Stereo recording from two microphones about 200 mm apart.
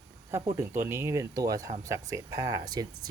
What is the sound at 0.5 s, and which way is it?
Speech, 10° right (ahead or behind).